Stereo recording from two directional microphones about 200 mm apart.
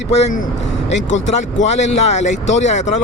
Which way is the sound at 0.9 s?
70° left (ahead or behind).